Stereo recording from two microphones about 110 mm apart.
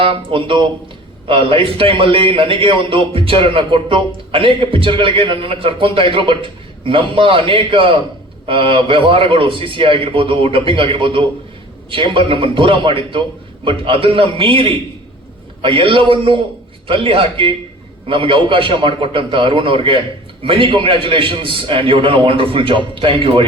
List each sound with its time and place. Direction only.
0.0 s a man's voice: 55° right (ahead or behind)